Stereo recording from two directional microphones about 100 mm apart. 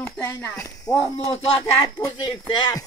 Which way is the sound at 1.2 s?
65° left (ahead or behind).